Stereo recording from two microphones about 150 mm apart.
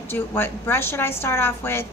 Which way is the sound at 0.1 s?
15° left (ahead or behind).